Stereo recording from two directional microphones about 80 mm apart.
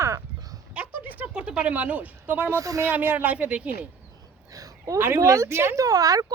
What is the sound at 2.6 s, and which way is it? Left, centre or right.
Speech, right.